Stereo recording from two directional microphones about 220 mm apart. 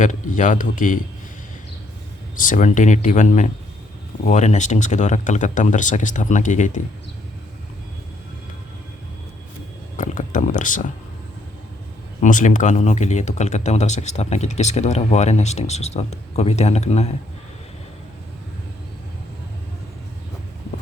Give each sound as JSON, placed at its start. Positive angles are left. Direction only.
{"t": 0.0, "sound": "speech", "side_deg": 35}
{"t": 2.3, "sound": "speech", "side_deg": 35}
{"t": 10.0, "sound": "speech", "side_deg": 35}
{"t": 12.2, "sound": "speech", "side_deg": 35}